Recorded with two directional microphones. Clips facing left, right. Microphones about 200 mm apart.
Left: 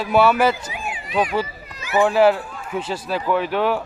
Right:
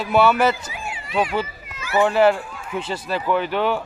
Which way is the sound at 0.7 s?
20° left (ahead or behind).